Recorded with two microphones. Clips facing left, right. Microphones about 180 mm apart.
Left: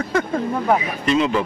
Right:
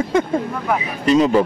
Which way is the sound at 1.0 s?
35° right (ahead or behind).